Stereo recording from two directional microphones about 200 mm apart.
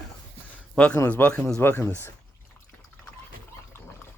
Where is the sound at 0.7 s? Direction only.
5° left (ahead or behind).